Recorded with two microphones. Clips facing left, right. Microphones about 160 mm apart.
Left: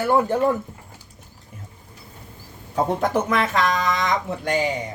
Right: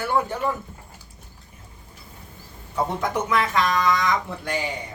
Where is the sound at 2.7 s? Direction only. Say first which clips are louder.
Left 4 dB; 50° left (ahead or behind).